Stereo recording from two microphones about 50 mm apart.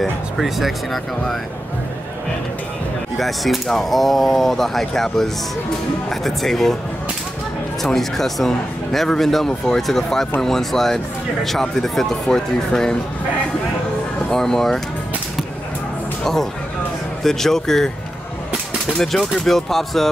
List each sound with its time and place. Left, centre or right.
0.4 s speech: centre
3.2 s speech: centre
7.8 s speech: centre
14.3 s speech: centre
17.2 s speech: centre
19.3 s speech: centre